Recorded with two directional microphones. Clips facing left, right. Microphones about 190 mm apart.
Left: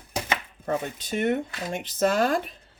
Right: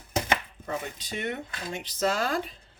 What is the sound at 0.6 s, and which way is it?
Speech, 50° left (ahead or behind).